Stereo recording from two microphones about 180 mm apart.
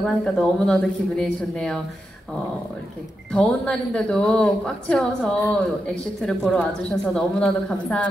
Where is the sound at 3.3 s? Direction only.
5° left (ahead or behind).